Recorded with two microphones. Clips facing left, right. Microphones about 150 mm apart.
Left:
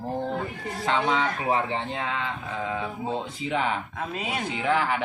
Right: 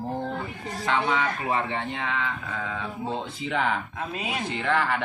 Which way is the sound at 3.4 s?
5° left (ahead or behind).